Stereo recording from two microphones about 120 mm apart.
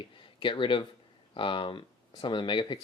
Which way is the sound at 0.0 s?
45° left (ahead or behind).